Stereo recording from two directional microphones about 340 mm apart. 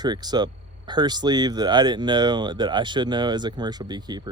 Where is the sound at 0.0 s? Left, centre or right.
Centre.